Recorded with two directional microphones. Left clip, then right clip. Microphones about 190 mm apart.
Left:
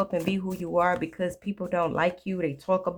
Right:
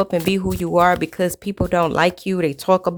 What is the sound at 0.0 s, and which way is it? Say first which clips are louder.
Speech: right 8 dB; 50° right (ahead or behind).